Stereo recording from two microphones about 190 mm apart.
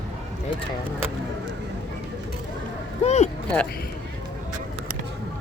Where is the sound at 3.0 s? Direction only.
35° left (ahead or behind).